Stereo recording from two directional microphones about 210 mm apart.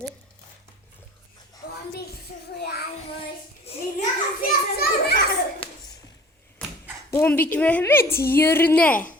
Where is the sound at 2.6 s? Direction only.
50° left (ahead or behind).